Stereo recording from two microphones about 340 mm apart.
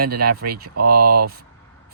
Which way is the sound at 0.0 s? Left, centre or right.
Right.